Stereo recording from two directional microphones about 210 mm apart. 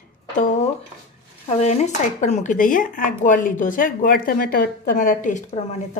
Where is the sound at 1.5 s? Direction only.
30° left (ahead or behind).